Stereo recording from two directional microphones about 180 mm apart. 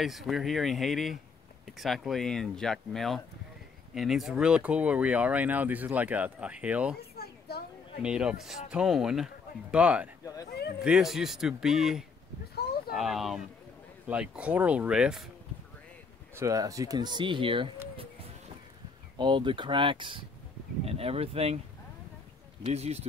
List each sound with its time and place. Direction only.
0.0 s speech: centre (ahead or behind)
7.0 s children playing: 60° left (ahead or behind)
8.0 s speech: 5° right (ahead or behind)
10.2 s a sound: 20° left (ahead or behind)
10.8 s speech: 5° right (ahead or behind)
16.3 s speech: 20° right (ahead or behind)
19.1 s speech: 25° right (ahead or behind)
22.6 s speech: 35° right (ahead or behind)